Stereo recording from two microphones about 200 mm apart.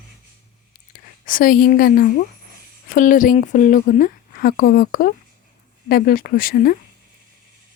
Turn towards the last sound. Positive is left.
turn(degrees=45)  # may be behind; listen again after turning